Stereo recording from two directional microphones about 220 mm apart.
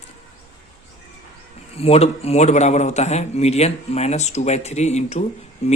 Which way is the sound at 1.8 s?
30° left (ahead or behind).